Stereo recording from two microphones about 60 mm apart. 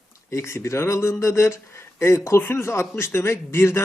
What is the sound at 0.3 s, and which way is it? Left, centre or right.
A man's voice, left.